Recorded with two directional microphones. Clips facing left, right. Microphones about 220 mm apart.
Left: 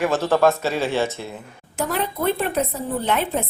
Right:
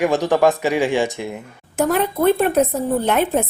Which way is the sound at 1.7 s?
50° right (ahead or behind).